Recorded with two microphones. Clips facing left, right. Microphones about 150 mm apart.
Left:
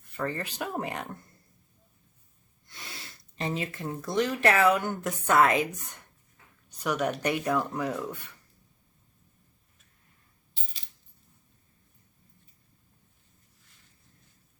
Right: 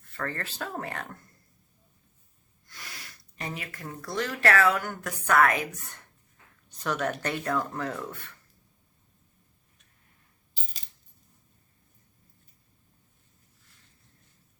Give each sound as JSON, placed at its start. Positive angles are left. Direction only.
{"t": 0.1, "sound": "speech", "side_deg": 15}
{"t": 2.6, "sound": "speech", "side_deg": 25}